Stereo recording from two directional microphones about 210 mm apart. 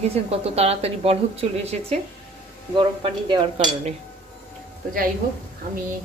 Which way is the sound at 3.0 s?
25° right (ahead or behind).